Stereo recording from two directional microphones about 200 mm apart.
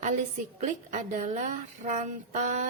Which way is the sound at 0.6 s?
40° right (ahead or behind).